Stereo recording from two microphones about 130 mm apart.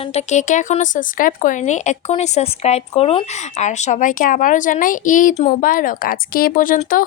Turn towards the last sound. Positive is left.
turn(degrees=90)